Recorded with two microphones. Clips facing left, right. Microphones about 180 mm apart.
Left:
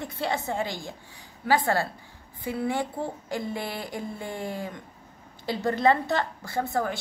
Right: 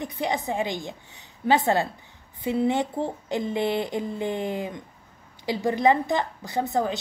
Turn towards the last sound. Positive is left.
turn(degrees=-20)  # may be behind; listen again after turning